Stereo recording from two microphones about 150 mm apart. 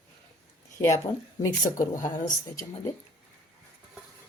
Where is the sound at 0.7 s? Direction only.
20° left (ahead or behind).